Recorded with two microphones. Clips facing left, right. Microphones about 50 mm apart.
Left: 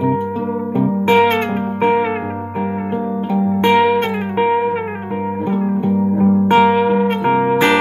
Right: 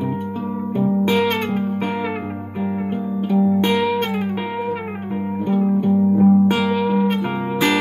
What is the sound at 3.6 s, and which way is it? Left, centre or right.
Music, left.